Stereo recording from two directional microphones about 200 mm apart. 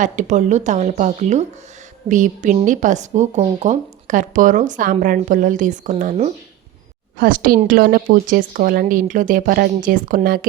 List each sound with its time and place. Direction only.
0.0 s a woman's voice: 35° right (ahead or behind)